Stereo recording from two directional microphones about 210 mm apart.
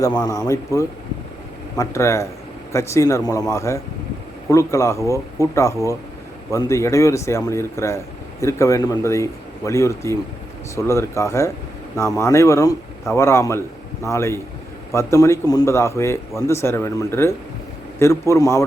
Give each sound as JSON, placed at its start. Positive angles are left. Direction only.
{"t": 0.0, "sound": "speech", "side_deg": 15}